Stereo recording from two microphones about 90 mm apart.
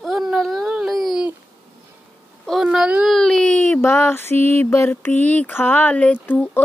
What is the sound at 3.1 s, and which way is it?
Speech, 5° left (ahead or behind).